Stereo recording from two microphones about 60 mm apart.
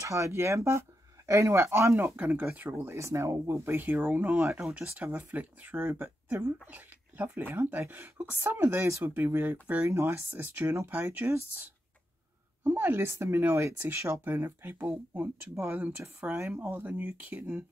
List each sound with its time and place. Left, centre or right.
0.0 s speech: right
2.1 s speech: right
2.6 s speech: right
3.0 s speech: right
3.8 s speech: right
4.6 s speech: centre
4.9 s speech: right
8.6 s speech: right
9.0 s speech: right
9.8 s speech: right
12.6 s speech: right
14.2 s speech: right